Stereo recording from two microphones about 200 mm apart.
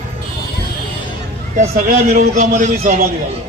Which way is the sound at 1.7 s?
45° right (ahead or behind).